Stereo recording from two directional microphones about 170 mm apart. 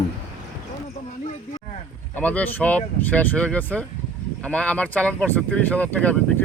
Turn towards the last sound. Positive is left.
turn(degrees=10)  # may be behind; listen again after turning